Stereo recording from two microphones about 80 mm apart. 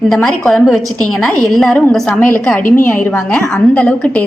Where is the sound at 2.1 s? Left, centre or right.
Left.